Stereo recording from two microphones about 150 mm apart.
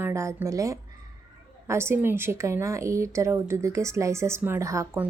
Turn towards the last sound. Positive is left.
turn(degrees=-20)  # may be behind; listen again after turning